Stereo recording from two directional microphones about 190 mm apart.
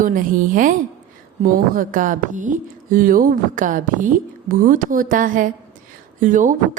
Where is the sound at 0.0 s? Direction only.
45° right (ahead or behind).